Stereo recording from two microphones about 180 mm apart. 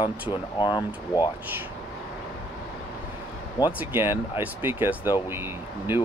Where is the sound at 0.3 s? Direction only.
25° left (ahead or behind).